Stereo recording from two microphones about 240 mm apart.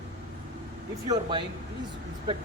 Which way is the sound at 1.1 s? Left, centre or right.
Centre.